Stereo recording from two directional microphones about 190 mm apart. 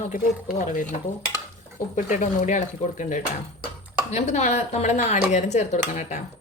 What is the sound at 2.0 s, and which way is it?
Speech, 40° left (ahead or behind).